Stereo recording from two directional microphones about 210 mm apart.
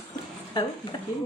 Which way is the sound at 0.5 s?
20° left (ahead or behind).